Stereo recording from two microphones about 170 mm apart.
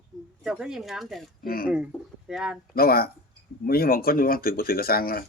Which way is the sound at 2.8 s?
60° left (ahead or behind).